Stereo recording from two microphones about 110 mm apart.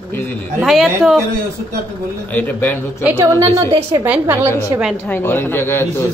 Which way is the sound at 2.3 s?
15° left (ahead or behind).